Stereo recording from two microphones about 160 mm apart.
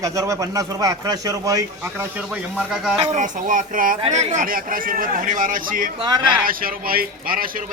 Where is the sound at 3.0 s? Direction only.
50° right (ahead or behind).